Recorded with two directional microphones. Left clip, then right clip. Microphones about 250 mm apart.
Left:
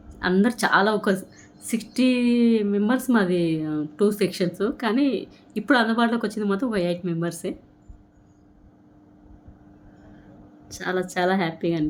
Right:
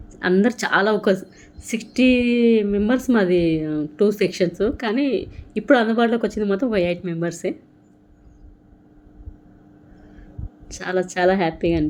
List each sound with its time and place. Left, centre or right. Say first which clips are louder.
0.2 s a woman's voice: right 3 dB; centre
10.7 s a woman's voice: right 3 dB; centre